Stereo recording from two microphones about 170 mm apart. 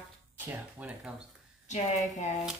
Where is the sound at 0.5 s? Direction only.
10° right (ahead or behind).